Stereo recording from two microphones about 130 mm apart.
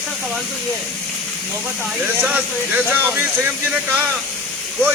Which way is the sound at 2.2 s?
10° right (ahead or behind).